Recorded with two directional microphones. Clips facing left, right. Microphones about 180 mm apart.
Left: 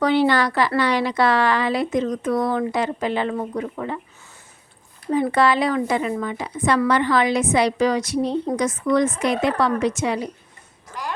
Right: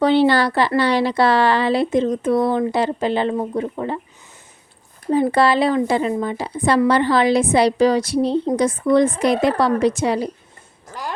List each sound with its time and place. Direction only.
0.0 s speech: 30° right (ahead or behind)
5.0 s speech: 35° right (ahead or behind)